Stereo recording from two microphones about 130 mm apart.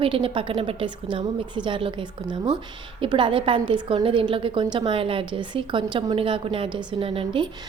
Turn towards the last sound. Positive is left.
turn(degrees=-45)  # may be behind; listen again after turning